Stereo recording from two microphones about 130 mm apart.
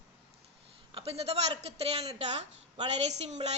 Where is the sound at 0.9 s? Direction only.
50° right (ahead or behind).